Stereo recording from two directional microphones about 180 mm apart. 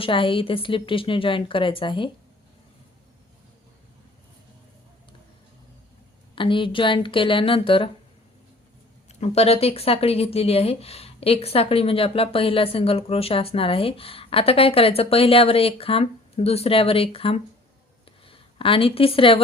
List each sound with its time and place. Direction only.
0.0 s a woman's voice: 30° left (ahead or behind)
6.3 s a woman's voice: 30° left (ahead or behind)
9.0 s speech: 35° left (ahead or behind)